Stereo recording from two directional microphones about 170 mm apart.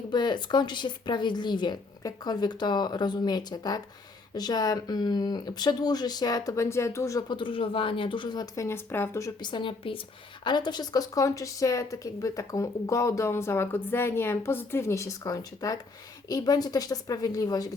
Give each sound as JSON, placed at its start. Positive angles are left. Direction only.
{"t": 0.1, "sound": "speech", "side_deg": 25}